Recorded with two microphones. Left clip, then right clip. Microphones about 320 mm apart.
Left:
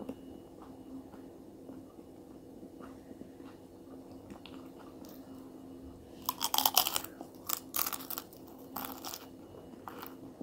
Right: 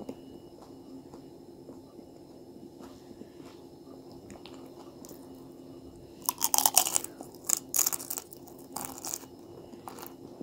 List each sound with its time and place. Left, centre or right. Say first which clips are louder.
6.2 s chewing: right 3 dB; centre
7.4 s scissors: right 7 dB; centre
8.7 s crunch: right 3 dB; centre